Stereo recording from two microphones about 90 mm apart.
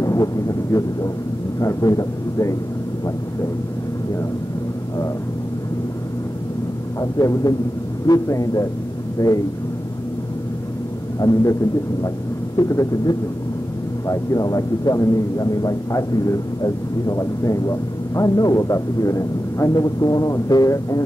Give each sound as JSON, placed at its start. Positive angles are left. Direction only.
{"t": 0.0, "sound": "speech", "side_deg": 40}
{"t": 7.0, "sound": "a man's voice", "side_deg": 40}
{"t": 11.1, "sound": "a man's voice", "side_deg": 45}
{"t": 12.5, "sound": "a man's voice", "side_deg": 40}